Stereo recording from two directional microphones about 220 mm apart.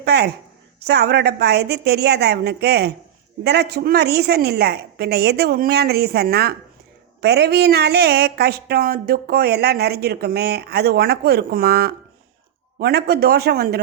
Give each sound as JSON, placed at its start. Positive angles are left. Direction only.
{"t": 0.0, "sound": "speech", "side_deg": -50}